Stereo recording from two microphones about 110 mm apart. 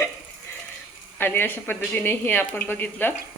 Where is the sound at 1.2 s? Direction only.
20° left (ahead or behind).